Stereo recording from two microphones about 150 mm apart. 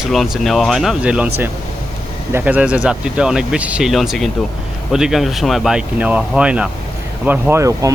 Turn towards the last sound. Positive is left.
turn(degrees=-20)  # may be behind; listen again after turning